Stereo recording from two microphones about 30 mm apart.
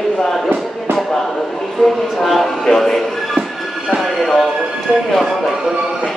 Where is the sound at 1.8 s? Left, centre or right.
Centre.